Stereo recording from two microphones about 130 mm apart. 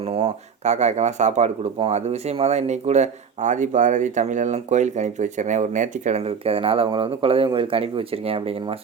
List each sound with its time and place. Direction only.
0.1 s speech: 55° right (ahead or behind)